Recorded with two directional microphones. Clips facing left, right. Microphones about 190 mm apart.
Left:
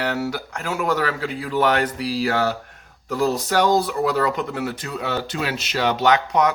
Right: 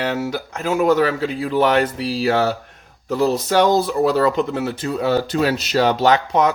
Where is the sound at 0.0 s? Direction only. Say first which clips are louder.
Right 2 dB; 20° right (ahead or behind).